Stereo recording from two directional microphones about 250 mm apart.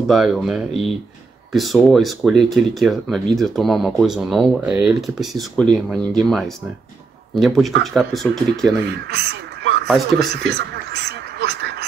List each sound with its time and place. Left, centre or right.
0.0 s speech: centre
9.0 s speech: right
10.4 s a sound: right